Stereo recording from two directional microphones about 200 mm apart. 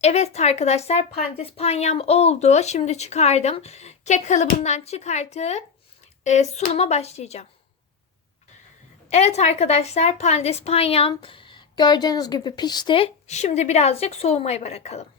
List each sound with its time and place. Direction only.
0.0 s a woman's voice: 35° left (ahead or behind)
9.0 s a woman's voice: 30° left (ahead or behind)